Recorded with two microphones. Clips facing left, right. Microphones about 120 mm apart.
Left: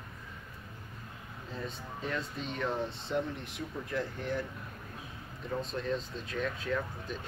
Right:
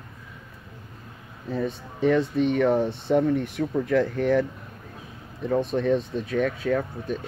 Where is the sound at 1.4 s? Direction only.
70° right (ahead or behind); by 4.4 s 90° right.